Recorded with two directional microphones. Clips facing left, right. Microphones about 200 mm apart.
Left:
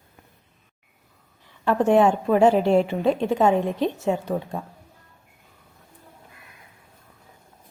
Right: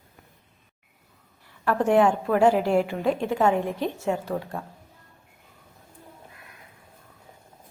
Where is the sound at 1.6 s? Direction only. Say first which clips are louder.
Left 2 dB; 25° left (ahead or behind).